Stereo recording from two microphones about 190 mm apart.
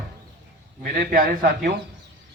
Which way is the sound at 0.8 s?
55° right (ahead or behind).